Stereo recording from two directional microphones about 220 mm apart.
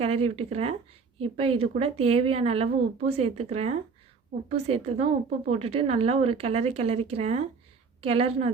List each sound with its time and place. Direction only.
0.0 s a woman's voice: 25° right (ahead or behind)